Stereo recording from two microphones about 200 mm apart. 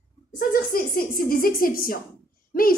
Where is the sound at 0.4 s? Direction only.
45° left (ahead or behind).